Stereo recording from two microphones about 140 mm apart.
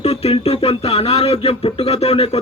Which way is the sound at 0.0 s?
45° left (ahead or behind).